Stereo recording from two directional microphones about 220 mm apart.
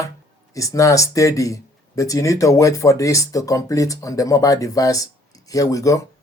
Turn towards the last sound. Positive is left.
turn(degrees=15)  # may be behind; listen again after turning